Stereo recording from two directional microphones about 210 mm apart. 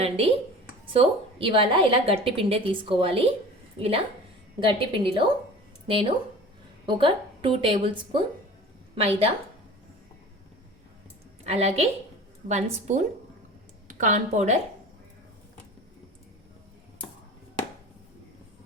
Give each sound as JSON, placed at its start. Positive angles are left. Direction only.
{"t": 0.9, "sound": "a woman's voice", "side_deg": -25}
{"t": 11.4, "sound": "a woman's voice", "side_deg": -30}